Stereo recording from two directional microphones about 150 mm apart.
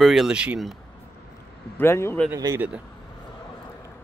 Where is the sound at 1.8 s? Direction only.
15° left (ahead or behind).